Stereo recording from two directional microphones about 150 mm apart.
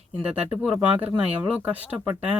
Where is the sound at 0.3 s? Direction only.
5° right (ahead or behind).